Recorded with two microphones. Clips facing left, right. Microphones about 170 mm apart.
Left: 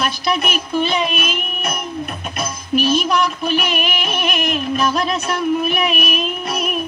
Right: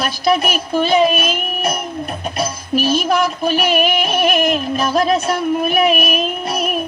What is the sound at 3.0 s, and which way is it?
Music, 45° right (ahead or behind).